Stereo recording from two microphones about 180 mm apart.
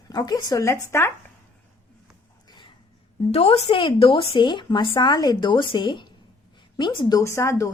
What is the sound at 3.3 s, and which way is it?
Speech, 35° left (ahead or behind).